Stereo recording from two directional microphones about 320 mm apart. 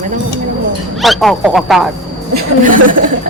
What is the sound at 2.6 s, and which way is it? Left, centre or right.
Speech, right.